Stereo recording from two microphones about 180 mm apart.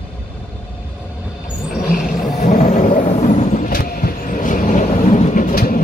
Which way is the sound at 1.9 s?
45° left (ahead or behind).